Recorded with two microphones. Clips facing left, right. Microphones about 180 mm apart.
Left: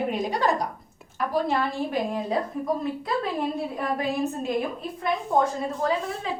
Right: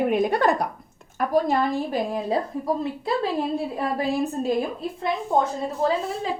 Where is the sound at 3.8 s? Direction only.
30° right (ahead or behind).